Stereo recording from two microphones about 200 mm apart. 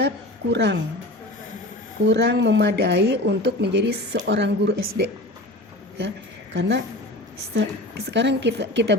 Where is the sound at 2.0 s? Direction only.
60° right (ahead or behind).